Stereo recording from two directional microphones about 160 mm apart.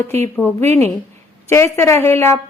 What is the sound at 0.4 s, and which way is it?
A woman's voice, 15° left (ahead or behind).